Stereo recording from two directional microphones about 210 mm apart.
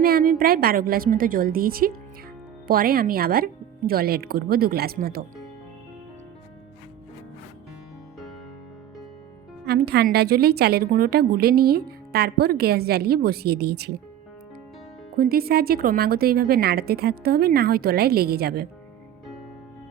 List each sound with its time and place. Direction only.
0.0 s a woman's voice: 45° right (ahead or behind)
9.6 s a woman's voice: 50° right (ahead or behind)
15.1 s a woman's voice: 45° right (ahead or behind)